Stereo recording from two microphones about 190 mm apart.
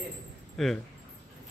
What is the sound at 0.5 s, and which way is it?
Speech, centre (ahead or behind).